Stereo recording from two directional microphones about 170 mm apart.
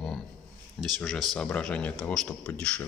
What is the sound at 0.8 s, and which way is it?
Speech, centre (ahead or behind).